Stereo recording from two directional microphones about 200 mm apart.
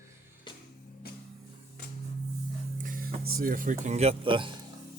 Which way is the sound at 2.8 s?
45° right (ahead or behind).